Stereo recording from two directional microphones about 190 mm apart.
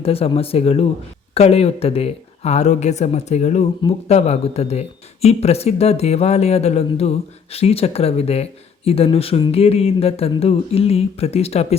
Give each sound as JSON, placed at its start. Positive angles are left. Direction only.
{"t": 0.0, "sound": "speech", "side_deg": 30}